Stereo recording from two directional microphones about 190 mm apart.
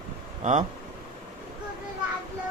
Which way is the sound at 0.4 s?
40° right (ahead or behind).